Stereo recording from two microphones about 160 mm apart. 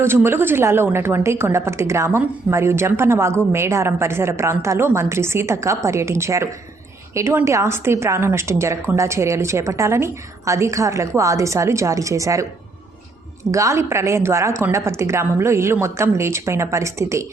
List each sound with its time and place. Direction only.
0.0 s a woman's voice: 15° right (ahead or behind)
13.5 s a woman's voice: 20° right (ahead or behind)